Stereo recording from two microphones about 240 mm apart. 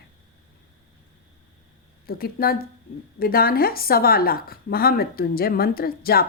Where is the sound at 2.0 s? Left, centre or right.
Left.